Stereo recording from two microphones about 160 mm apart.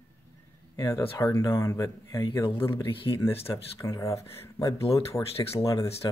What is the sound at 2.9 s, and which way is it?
Speech, 30° left (ahead or behind).